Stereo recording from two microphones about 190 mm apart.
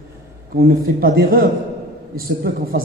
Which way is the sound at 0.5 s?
50° right (ahead or behind).